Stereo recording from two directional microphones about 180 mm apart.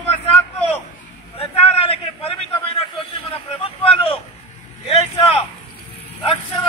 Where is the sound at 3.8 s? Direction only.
30° left (ahead or behind).